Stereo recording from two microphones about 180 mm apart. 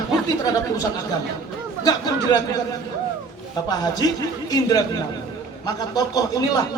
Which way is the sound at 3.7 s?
20° left (ahead or behind).